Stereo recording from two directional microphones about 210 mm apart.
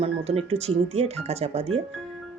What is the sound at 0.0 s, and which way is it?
Speech, 30° right (ahead or behind).